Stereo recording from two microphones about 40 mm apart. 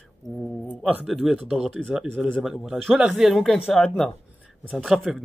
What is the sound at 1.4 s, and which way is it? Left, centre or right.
Speech, centre.